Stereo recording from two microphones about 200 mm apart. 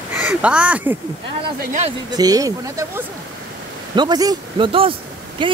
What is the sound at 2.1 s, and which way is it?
Speech, 20° right (ahead or behind).